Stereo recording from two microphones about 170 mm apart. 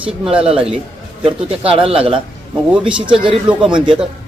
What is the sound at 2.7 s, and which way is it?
Speech, 5° right (ahead or behind).